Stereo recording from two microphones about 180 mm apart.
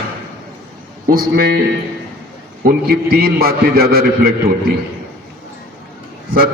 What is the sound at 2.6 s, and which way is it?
A man's voice, 60° right (ahead or behind).